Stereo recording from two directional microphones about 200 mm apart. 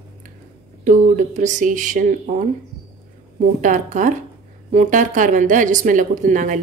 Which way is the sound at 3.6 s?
40° right (ahead or behind).